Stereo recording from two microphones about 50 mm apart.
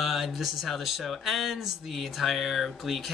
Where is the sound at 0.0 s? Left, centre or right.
Centre.